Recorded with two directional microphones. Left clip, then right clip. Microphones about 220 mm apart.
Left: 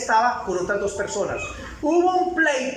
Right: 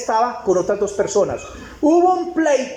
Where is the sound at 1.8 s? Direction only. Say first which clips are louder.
Right 7 dB; 35° right (ahead or behind).